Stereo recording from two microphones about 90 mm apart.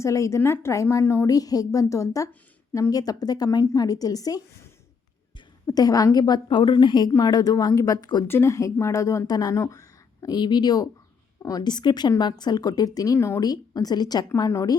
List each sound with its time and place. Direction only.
0.0 s speech: 35° left (ahead or behind)
1.3 s a woman's voice: 45° left (ahead or behind)
5.6 s a woman's voice: 45° left (ahead or behind)
7.2 s a woman's voice: 45° left (ahead or behind)
8.3 s a woman's voice: 30° left (ahead or behind)
13.1 s speech: 30° left (ahead or behind)
13.4 s a woman's voice: 45° left (ahead or behind)